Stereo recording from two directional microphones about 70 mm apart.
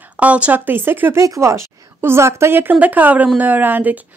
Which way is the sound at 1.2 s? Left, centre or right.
Right.